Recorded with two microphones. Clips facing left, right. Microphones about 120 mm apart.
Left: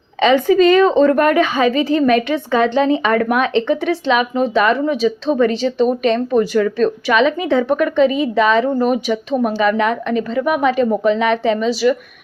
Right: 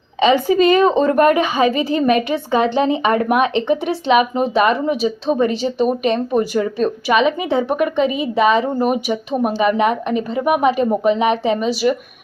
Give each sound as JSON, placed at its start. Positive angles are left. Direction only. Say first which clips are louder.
{"t": 0.5, "sound": "speech", "louder": "left 4 dB", "side_deg": -15}